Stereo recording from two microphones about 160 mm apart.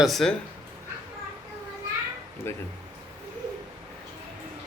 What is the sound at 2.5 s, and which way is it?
Speech, 15° left (ahead or behind).